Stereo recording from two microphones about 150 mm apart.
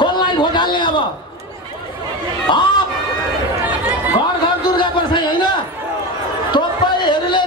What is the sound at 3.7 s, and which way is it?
Chatter, 15° right (ahead or behind).